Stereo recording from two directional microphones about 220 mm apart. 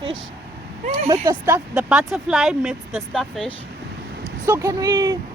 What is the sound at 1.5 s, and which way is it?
Speech, 5° right (ahead or behind).